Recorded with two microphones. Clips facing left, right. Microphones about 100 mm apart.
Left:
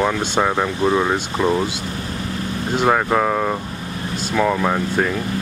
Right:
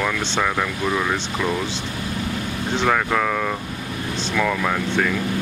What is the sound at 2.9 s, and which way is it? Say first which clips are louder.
Speech: left 4 dB; 25° left (ahead or behind).